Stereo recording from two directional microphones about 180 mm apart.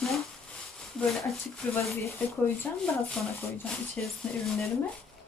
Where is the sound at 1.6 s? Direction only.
5° left (ahead or behind).